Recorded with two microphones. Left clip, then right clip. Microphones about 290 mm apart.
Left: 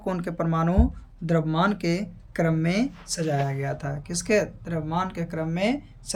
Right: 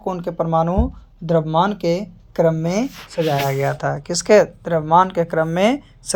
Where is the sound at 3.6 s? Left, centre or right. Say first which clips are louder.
Right 11 dB; right.